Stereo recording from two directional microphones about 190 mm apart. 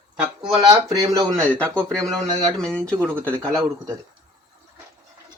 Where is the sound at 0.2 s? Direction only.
20° right (ahead or behind).